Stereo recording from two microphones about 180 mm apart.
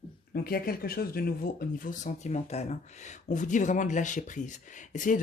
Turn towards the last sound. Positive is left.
turn(degrees=45)  # may be behind; listen again after turning